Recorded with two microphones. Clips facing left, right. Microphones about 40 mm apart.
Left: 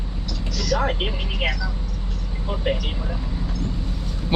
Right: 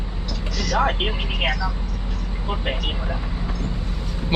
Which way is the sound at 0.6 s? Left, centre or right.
Right.